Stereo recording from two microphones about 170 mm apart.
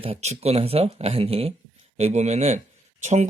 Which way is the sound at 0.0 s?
40° right (ahead or behind).